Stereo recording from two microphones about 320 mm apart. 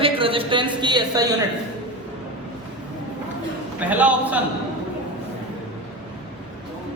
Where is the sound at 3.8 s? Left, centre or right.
Centre.